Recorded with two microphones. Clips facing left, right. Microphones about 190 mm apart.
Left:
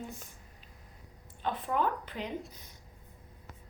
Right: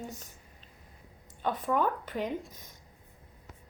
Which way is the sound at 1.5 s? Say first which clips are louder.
Right 2 dB; 45° right (ahead or behind).